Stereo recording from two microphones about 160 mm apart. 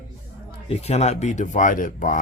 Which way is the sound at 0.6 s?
40° left (ahead or behind).